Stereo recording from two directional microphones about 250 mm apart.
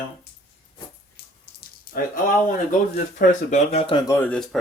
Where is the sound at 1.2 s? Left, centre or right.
Left.